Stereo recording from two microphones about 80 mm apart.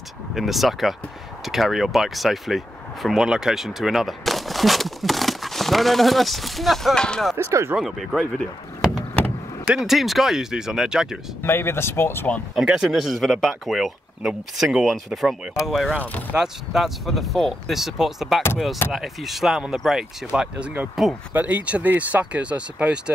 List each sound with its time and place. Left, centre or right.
0.3 s speech: centre
7.3 s speech: right
7.7 s speech: centre
9.8 s speech: centre
11.4 s speech: left
12.5 s speech: centre
16.0 s speech: left
16.3 s speech: centre
20.3 s speech: centre